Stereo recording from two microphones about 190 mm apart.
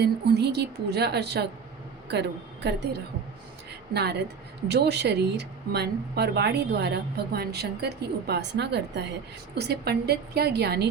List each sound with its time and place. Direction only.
0.0 s a woman's voice: 60° right (ahead or behind)
3.7 s a sound: 60° right (ahead or behind)
4.7 s speech: 60° right (ahead or behind)